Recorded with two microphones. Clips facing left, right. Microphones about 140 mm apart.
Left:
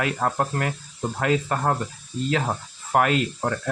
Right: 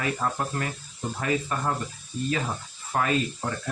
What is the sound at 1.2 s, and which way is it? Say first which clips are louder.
Speech: left 4 dB; 70° left (ahead or behind).